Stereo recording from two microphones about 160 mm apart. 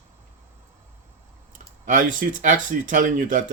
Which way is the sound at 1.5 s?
55° right (ahead or behind).